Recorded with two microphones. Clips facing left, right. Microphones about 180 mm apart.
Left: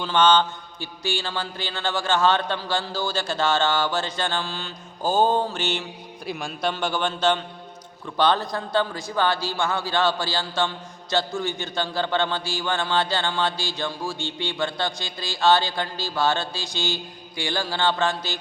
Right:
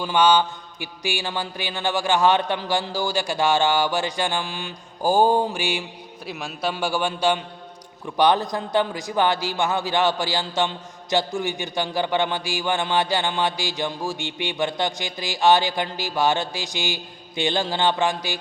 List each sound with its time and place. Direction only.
0.0 s a man's voice: 10° right (ahead or behind)